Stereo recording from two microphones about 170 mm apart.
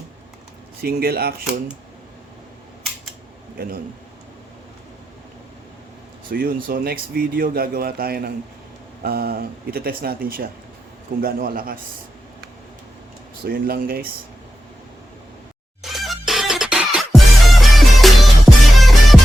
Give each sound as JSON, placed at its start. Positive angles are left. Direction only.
{"t": 0.8, "sound": "a man's voice", "side_deg": -65}
{"t": 6.3, "sound": "a man's voice", "side_deg": -65}
{"t": 13.4, "sound": "a man's voice", "side_deg": -60}
{"t": 15.8, "sound": "music", "side_deg": 0}